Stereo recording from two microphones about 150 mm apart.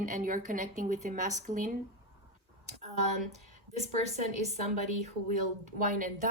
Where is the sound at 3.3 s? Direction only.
50° right (ahead or behind).